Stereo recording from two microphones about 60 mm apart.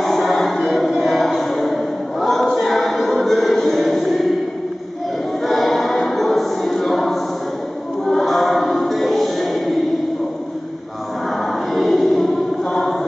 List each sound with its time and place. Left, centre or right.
0.0 s a sound: centre
5.4 s choir: centre
8.0 s music: centre
11.7 s choir: centre